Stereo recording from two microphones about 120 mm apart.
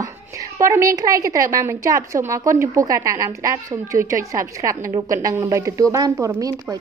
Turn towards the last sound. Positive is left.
turn(degrees=-30)  # may be behind; listen again after turning